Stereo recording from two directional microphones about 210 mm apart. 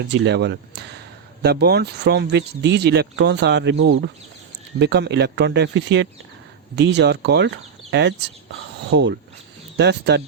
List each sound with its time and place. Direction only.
0.1 s speech: 55° right (ahead or behind)